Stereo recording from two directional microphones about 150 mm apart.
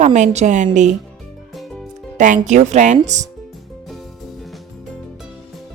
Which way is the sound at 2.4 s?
55° right (ahead or behind).